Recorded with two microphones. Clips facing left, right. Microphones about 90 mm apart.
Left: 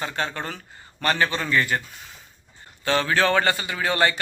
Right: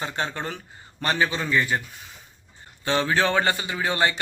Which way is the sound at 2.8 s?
20° right (ahead or behind).